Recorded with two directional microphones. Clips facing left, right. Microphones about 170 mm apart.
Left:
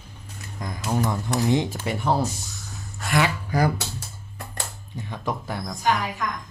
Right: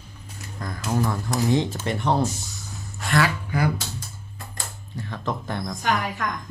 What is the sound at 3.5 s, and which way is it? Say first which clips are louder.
Speech: left 3 dB; 40° left (ahead or behind).